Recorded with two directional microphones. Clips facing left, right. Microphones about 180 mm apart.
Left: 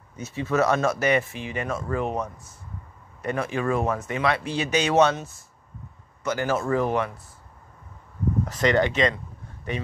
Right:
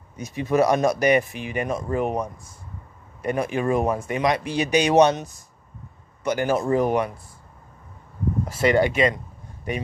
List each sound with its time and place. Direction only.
0.2 s speech: 15° right (ahead or behind)
8.5 s speech: 10° right (ahead or behind)